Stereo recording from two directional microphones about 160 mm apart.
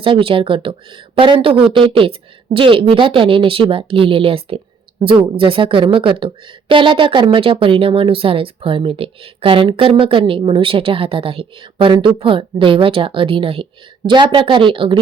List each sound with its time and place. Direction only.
0.0 s a woman's voice: 35° right (ahead or behind)